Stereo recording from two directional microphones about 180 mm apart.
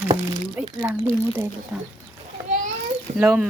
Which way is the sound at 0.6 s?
10° right (ahead or behind).